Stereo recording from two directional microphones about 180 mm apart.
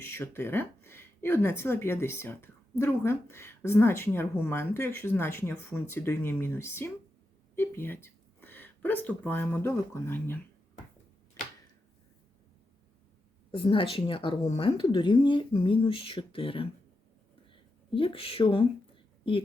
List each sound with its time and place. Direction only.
0.0 s speech: 15° left (ahead or behind)
13.5 s speech: 30° left (ahead or behind)